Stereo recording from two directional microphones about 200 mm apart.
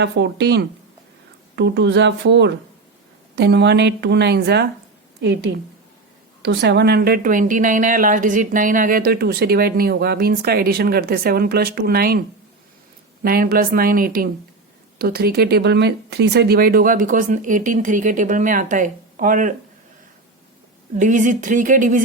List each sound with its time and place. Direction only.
0.0 s a woman's voice: 60° right (ahead or behind)
13.2 s speech: 50° right (ahead or behind)
20.9 s speech: 40° right (ahead or behind)